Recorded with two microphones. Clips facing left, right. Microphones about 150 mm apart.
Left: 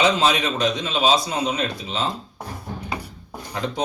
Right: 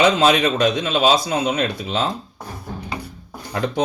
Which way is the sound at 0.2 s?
60° right (ahead or behind).